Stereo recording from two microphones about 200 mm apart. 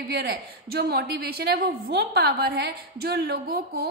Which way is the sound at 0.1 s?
55° right (ahead or behind).